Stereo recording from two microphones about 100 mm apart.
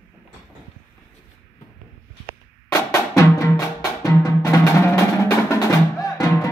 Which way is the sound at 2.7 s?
30° left (ahead or behind).